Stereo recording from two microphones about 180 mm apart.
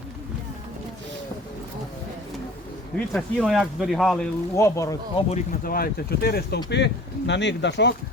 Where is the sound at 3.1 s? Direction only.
Centre (ahead or behind).